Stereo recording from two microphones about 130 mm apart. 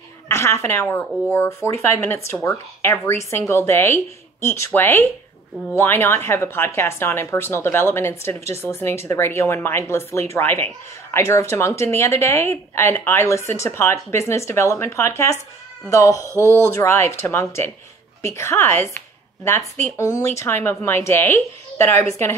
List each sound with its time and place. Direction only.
0.3 s a woman's voice: 20° left (ahead or behind)
16.3 s speech: 20° right (ahead or behind)
16.7 s speech: 20° left (ahead or behind)